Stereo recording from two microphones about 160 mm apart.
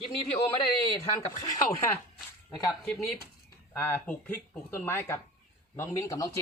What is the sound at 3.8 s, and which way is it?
Speech, 15° left (ahead or behind).